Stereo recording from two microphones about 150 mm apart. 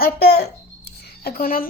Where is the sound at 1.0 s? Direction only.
80° left.